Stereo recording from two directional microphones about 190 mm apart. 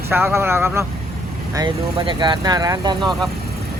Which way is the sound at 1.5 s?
25° right (ahead or behind).